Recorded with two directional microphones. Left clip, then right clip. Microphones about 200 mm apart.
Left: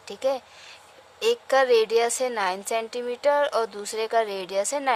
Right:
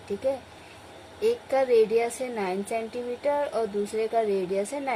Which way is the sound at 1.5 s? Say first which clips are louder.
Left 2 dB; 55° left (ahead or behind).